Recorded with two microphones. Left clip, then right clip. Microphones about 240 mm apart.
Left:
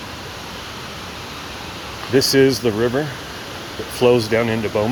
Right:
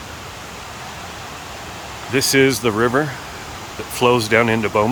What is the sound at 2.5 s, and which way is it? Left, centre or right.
Speech, right.